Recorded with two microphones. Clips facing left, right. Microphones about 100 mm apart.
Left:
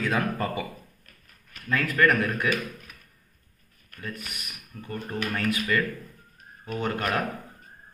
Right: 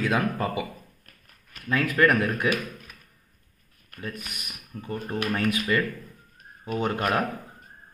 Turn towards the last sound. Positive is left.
turn(degrees=-20)  # may be behind; listen again after turning